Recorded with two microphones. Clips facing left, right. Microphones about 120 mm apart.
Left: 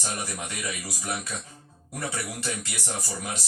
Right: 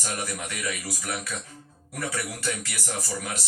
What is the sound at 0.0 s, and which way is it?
A man's voice, 25° left (ahead or behind).